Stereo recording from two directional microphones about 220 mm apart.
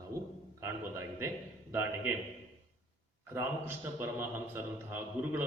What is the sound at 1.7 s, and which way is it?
Speech, 10° right (ahead or behind).